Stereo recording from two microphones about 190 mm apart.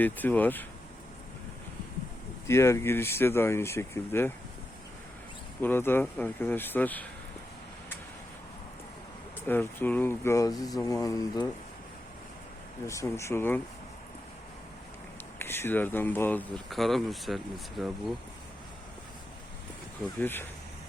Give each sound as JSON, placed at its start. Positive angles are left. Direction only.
{"t": 0.0, "sound": "speech", "side_deg": 10}
{"t": 2.5, "sound": "speech", "side_deg": 15}
{"t": 5.6, "sound": "speech", "side_deg": 10}
{"t": 9.5, "sound": "speech", "side_deg": 10}
{"t": 12.9, "sound": "speech", "side_deg": 15}
{"t": 15.4, "sound": "speech", "side_deg": 10}
{"t": 20.1, "sound": "speech", "side_deg": 10}